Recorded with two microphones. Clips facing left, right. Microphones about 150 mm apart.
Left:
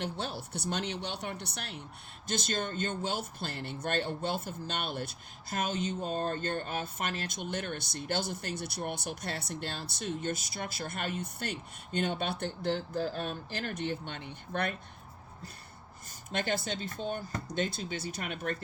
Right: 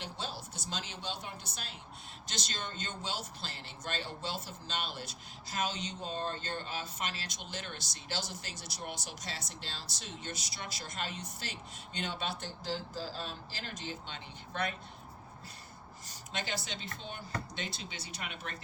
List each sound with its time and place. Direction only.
0.0 s speech: 60° left (ahead or behind)
2.2 s speech: 50° left (ahead or behind)
16.0 s speech: 55° left (ahead or behind)